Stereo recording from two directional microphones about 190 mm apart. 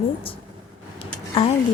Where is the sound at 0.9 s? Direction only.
30° left (ahead or behind).